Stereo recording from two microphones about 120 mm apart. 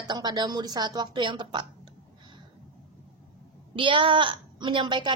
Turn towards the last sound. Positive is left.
turn(degrees=-40)  # may be behind; listen again after turning